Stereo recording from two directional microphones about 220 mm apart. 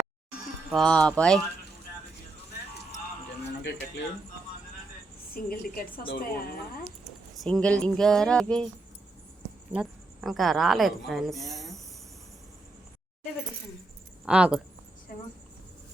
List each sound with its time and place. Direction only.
0.7 s speech: 5° left (ahead or behind)
3.6 s speech: 50° left (ahead or behind)
5.3 s a woman's voice: 40° left (ahead or behind)
7.0 s speech: centre (ahead or behind)
9.7 s a woman's voice: 5° right (ahead or behind)
14.3 s speech: 5° right (ahead or behind)